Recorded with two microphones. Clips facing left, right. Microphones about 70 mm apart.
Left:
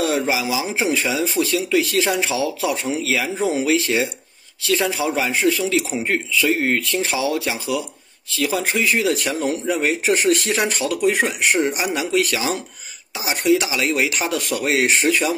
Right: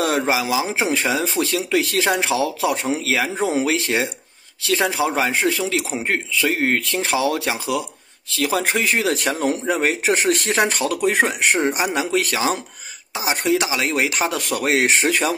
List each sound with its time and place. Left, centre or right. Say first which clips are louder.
0.0 s a man's voice: right 1 dB; right